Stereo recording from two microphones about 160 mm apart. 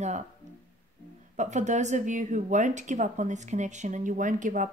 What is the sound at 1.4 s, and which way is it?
A woman's voice, 50° right (ahead or behind).